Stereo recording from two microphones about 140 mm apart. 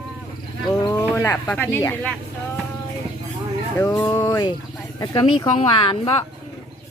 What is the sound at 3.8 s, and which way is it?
Speech, 15° left (ahead or behind).